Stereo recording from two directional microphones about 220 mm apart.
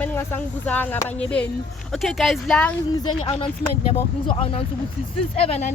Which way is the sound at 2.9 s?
20° left (ahead or behind).